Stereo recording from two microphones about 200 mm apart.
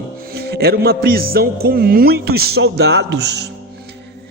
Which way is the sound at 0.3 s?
55° right (ahead or behind).